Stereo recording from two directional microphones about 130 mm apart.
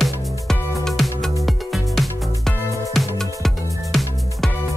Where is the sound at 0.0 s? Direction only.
Centre (ahead or behind).